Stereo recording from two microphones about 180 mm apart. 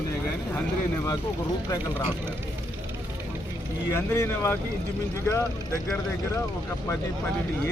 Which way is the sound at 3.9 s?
15° left (ahead or behind).